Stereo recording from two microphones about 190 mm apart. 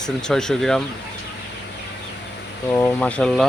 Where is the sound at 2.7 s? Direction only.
10° left (ahead or behind).